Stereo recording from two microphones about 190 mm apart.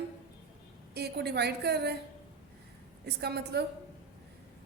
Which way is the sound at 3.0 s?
60° right (ahead or behind).